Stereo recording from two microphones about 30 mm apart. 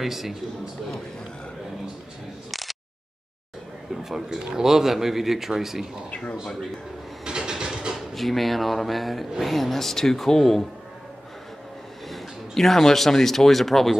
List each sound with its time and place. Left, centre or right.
0.0 s a man's voice: centre
2.5 s a sound: centre
4.3 s a man's voice: centre
6.4 s speech: centre
7.2 s a sound: right
8.1 s speech: centre
12.1 s speech: centre